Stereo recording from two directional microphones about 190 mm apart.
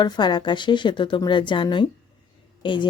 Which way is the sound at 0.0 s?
20° left (ahead or behind).